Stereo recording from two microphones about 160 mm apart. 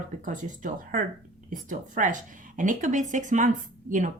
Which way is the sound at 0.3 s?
55° right (ahead or behind).